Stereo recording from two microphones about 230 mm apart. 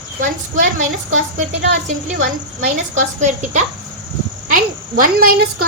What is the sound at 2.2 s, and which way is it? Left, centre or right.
Speech, right.